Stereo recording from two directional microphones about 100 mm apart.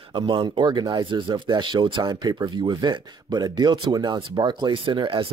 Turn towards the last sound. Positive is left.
turn(degrees=-55)  # may be behind; listen again after turning